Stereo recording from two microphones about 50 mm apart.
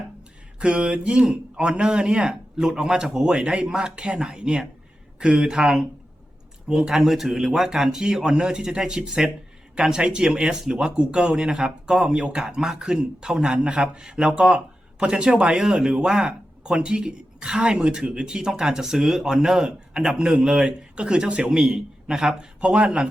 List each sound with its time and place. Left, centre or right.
0.6 s speech: right
21.6 s speech: centre